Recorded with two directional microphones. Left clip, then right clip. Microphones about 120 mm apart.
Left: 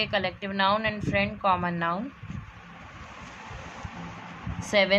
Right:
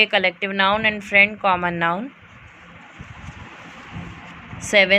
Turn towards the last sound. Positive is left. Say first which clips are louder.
# right 7 dB
turn(degrees=-35)  # may be behind; listen again after turning